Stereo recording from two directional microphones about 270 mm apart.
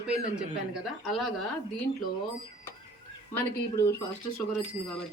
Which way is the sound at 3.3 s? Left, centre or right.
Centre.